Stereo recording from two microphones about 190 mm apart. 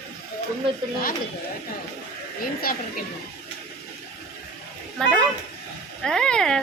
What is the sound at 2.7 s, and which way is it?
Speech, 50° left (ahead or behind).